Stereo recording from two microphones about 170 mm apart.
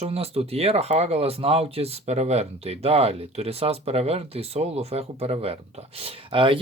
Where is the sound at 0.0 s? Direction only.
35° right (ahead or behind).